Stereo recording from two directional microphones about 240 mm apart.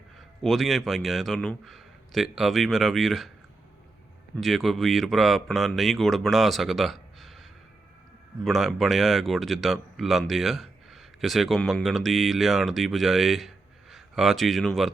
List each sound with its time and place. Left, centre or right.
0.4 s speech: centre
4.4 s speech: centre
8.4 s speech: centre